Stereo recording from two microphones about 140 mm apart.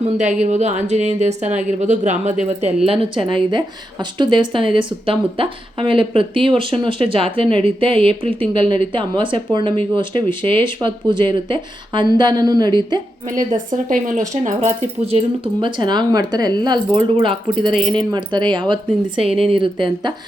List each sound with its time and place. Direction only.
0.0 s speech: 60° right (ahead or behind)
2.8 s a woman's voice: 40° right (ahead or behind)
13.3 s speech: 65° right (ahead or behind)
15.6 s a woman's voice: 35° right (ahead or behind)
17.7 s speech: centre (ahead or behind)
17.9 s a woman's voice: 30° right (ahead or behind)